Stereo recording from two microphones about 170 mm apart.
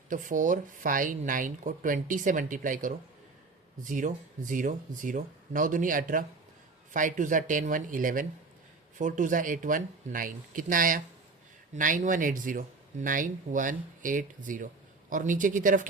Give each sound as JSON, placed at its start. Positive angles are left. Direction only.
{"t": 0.1, "sound": "speech", "side_deg": -50}